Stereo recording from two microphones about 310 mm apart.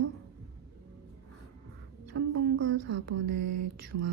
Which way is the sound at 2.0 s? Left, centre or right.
Right.